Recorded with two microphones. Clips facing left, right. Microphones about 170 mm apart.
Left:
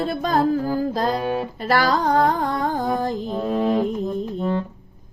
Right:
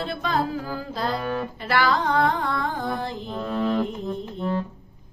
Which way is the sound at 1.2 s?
15° left (ahead or behind).